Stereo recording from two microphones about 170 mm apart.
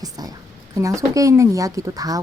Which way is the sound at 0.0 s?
20° right (ahead or behind).